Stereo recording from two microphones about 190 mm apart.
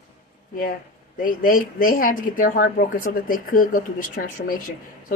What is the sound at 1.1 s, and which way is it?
Speech, 45° left (ahead or behind).